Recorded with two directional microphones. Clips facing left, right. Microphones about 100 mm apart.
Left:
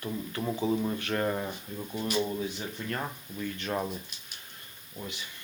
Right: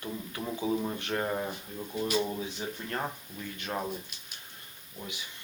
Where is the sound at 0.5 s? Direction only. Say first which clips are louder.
Left 1 dB; 15° right (ahead or behind).